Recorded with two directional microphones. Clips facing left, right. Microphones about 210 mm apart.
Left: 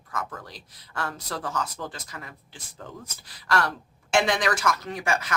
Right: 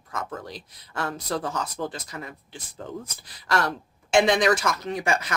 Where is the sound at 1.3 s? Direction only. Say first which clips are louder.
Right 7 dB; 20° right (ahead or behind).